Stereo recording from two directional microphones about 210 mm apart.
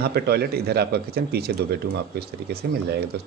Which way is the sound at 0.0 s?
50° right (ahead or behind).